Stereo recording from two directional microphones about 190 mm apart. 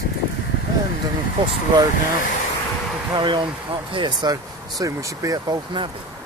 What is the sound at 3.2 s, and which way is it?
Speech, 25° right (ahead or behind).